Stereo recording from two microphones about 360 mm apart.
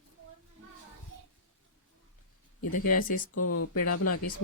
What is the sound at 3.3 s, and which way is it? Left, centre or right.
Speech, left.